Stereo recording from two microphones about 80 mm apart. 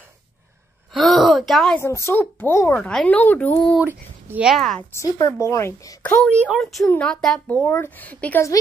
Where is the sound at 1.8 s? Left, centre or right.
Left.